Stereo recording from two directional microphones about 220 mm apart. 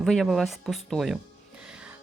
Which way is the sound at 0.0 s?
Centre (ahead or behind).